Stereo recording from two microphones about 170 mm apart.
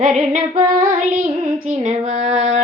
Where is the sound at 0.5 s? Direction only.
50° right (ahead or behind).